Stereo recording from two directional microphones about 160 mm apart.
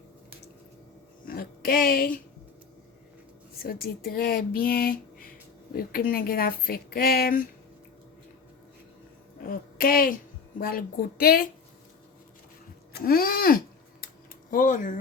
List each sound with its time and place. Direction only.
1.2 s speech: 65° left (ahead or behind)
3.6 s speech: 70° left (ahead or behind)
9.5 s a woman's voice: 65° left (ahead or behind)
12.9 s a woman's voice: 70° left (ahead or behind)